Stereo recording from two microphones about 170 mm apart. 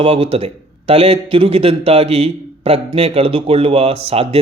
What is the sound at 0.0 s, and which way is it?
A man's voice, 35° right (ahead or behind).